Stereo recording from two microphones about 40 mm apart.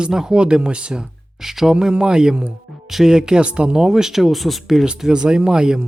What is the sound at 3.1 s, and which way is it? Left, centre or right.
Speech, centre.